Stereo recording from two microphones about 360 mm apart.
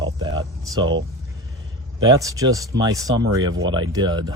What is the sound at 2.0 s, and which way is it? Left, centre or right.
Speech, centre.